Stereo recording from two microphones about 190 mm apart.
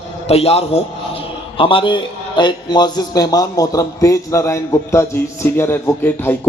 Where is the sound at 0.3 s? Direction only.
30° left (ahead or behind).